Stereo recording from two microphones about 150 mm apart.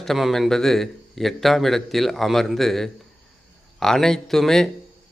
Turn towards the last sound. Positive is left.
turn(degrees=5)  # may be behind; listen again after turning